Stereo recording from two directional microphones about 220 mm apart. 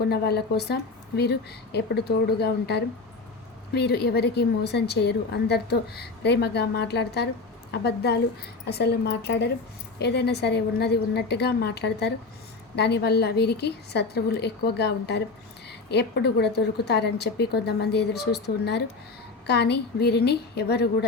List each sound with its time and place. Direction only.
0.1 s a woman's voice: 45° left (ahead or behind)